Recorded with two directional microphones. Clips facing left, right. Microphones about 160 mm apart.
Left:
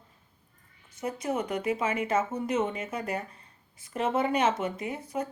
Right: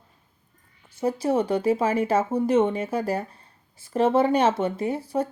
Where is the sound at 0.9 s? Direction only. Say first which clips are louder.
Right 8 dB; 30° right (ahead or behind).